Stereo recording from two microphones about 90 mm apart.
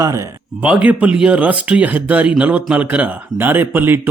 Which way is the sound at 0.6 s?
15° right (ahead or behind).